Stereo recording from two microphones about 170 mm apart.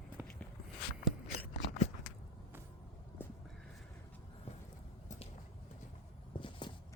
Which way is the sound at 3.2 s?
10° left (ahead or behind).